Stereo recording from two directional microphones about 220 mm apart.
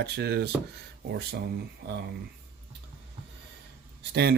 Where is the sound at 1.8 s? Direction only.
50° right (ahead or behind).